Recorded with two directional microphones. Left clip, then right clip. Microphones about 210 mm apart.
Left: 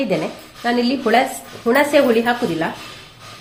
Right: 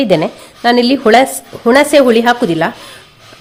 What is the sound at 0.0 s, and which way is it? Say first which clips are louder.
A woman's voice: right 9 dB; 55° right (ahead or behind).